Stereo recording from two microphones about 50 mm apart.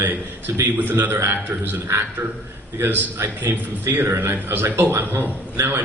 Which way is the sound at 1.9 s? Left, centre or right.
Right.